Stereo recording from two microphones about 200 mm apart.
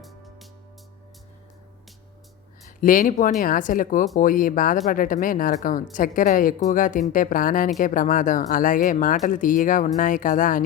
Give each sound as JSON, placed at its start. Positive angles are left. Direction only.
{"t": 2.6, "sound": "speech", "side_deg": 40}